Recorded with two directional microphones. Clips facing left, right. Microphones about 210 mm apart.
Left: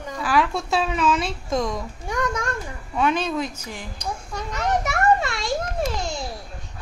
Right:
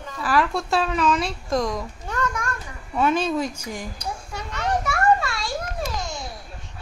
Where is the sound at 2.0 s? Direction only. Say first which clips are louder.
Left 3 dB; 15° left (ahead or behind).